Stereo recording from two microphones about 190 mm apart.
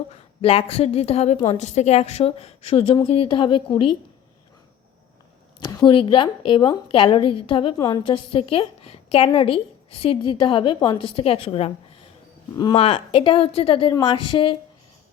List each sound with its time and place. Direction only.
0.4 s a woman's voice: 30° left (ahead or behind)
5.6 s a woman's voice: 25° left (ahead or behind)